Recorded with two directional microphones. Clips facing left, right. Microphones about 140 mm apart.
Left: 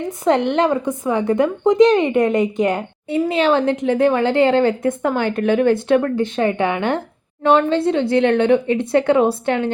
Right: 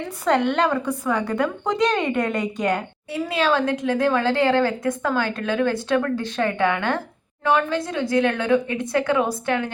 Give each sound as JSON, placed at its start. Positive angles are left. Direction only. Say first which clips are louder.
{"t": 0.0, "sound": "a woman's voice", "louder": "left 3 dB", "side_deg": 20}